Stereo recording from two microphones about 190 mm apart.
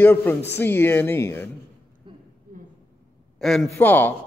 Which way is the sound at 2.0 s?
25° right (ahead or behind).